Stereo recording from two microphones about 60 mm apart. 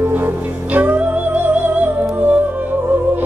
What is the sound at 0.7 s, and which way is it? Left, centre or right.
Music, right.